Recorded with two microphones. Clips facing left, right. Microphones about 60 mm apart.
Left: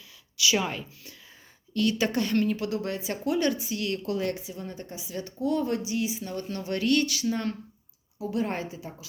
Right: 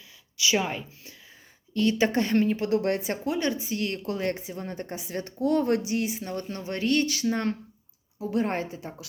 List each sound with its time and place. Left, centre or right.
0.3 s a woman's voice: right
2.6 s speech: right
3.2 s speech: right
3.6 s speech: right
6.5 s speech: right